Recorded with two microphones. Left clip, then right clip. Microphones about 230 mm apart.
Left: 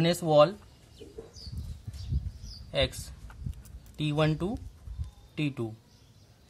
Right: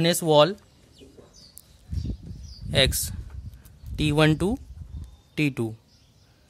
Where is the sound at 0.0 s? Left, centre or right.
Right.